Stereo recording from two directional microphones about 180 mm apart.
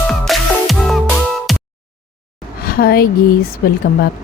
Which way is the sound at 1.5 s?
Centre (ahead or behind).